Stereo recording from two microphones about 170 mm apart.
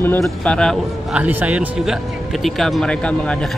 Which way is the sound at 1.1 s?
10° right (ahead or behind).